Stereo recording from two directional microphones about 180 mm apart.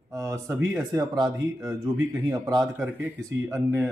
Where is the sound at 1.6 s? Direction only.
20° right (ahead or behind).